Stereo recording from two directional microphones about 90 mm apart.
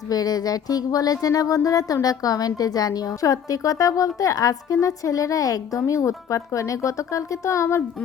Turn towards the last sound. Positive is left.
turn(degrees=30)  # may be behind; listen again after turning